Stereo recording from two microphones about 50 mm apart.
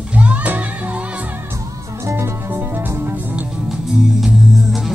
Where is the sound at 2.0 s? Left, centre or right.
Right.